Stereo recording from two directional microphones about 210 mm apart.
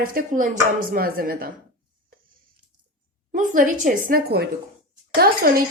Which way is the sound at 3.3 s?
40° right (ahead or behind).